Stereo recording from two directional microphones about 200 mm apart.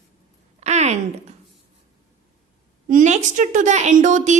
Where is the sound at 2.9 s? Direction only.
40° right (ahead or behind).